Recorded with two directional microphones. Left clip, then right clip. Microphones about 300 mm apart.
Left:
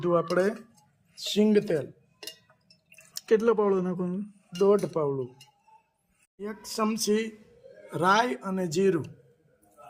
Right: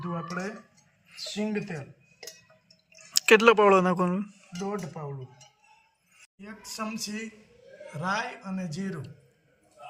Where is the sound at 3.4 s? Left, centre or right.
Right.